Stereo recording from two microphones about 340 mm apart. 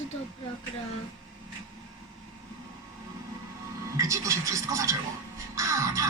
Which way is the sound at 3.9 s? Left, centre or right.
Centre.